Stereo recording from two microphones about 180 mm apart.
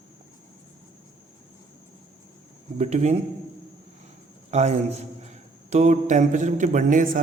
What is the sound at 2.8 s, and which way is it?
Speech, 40° right (ahead or behind).